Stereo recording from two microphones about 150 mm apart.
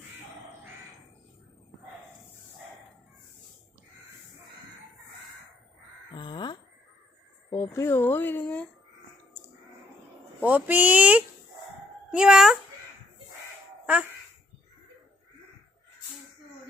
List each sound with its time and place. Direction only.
6.1 s a sound: 30° left (ahead or behind)
7.5 s speech: 20° left (ahead or behind)
10.4 s a child's voice: 10° right (ahead or behind)